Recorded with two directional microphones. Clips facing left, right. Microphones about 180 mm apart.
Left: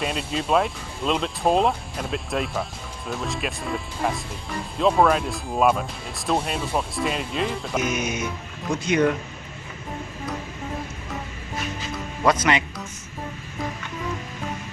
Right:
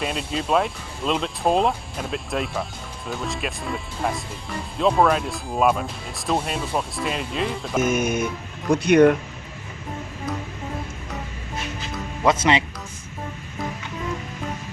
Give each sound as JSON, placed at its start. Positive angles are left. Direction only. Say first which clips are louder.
{"t": 0.0, "sound": "speech", "louder": "even", "side_deg": 0}
{"t": 7.8, "sound": "music", "louder": "right 6 dB", "side_deg": -50}
{"t": 8.7, "sound": "speech", "louder": "right 6 dB", "side_deg": -65}
{"t": 12.2, "sound": "speech", "louder": "right 1 dB", "side_deg": -25}